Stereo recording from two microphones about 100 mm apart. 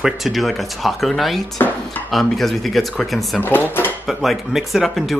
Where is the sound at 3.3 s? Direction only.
20° left (ahead or behind).